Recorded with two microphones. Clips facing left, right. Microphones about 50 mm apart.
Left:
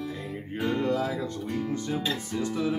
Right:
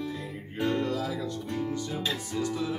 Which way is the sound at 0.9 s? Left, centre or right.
Left.